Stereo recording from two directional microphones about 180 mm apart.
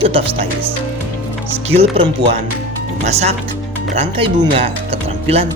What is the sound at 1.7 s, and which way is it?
Speech, 35° right (ahead or behind).